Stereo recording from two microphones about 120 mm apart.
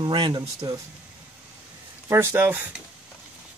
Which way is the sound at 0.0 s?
40° right (ahead or behind).